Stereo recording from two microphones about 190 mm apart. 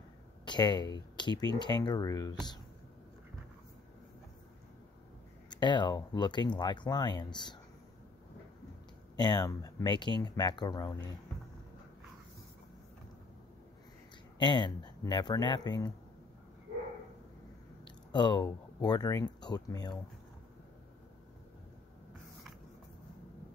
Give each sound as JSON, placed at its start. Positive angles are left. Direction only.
{"t": 0.5, "sound": "speech", "side_deg": 20}
{"t": 5.5, "sound": "speech", "side_deg": 25}
{"t": 9.1, "sound": "speech", "side_deg": 20}
{"t": 14.4, "sound": "speech", "side_deg": 25}
{"t": 18.1, "sound": "speech", "side_deg": 25}